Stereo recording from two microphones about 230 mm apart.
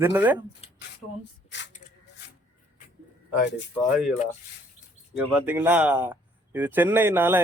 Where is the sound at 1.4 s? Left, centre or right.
Left.